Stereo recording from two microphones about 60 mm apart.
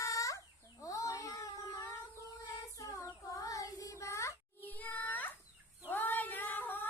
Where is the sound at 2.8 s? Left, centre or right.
Left.